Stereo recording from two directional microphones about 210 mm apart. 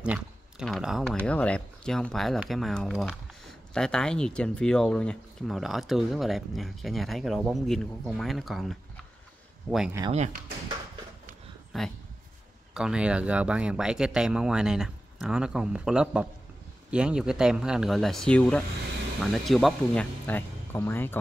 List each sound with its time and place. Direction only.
0.0 s speech: 5° right (ahead or behind)
10.1 s speech: 35° right (ahead or behind)
11.7 s speech: centre (ahead or behind)